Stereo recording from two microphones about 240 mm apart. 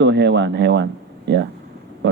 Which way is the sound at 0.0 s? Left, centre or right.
Right.